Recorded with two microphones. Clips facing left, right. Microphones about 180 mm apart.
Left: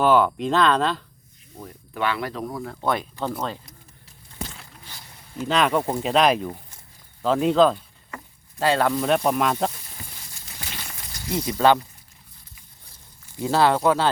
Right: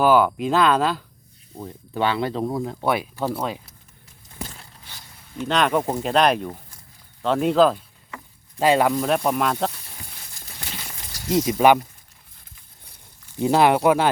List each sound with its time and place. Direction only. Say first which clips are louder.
0.0 s speech: right 1 dB; 5° right (ahead or behind)
1.6 s speech: right 3 dB; 30° right (ahead or behind)
2.8 s speech: right 1 dB; 10° right (ahead or behind)
5.4 s speech: even; centre (ahead or behind)
8.5 s speech: right 3 dB; 15° right (ahead or behind)
8.9 s speech: even; centre (ahead or behind)
11.3 s speech: right 3 dB; 20° right (ahead or behind)
13.4 s speech: right 2 dB; 15° right (ahead or behind)